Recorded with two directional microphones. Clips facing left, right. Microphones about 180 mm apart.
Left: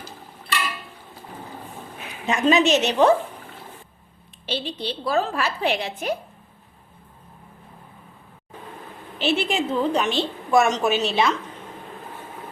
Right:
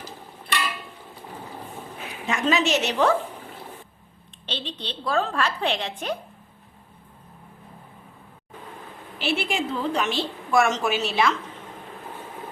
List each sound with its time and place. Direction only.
2.2 s a woman's voice: 20° left (ahead or behind)
4.4 s a woman's voice: 10° left (ahead or behind)
9.1 s a woman's voice: 20° left (ahead or behind)